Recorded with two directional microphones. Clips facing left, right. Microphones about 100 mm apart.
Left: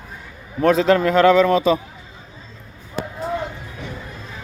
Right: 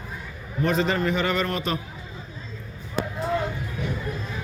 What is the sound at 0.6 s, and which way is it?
Speech, 90° left.